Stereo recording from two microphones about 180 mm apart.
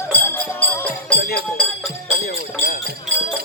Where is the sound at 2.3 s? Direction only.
50° left (ahead or behind).